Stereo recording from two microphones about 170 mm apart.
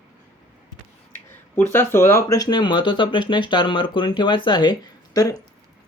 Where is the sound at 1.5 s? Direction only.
15° left (ahead or behind).